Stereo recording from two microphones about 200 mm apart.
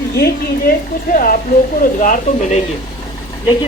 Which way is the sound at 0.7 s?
45° left (ahead or behind).